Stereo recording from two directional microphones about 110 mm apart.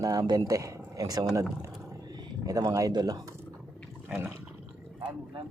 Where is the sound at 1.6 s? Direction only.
35° right (ahead or behind).